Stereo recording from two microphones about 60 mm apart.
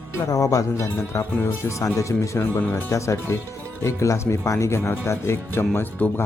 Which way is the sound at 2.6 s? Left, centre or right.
Left.